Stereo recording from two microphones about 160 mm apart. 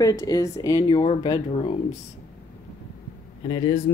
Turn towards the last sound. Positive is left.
turn(degrees=25)  # may be behind; listen again after turning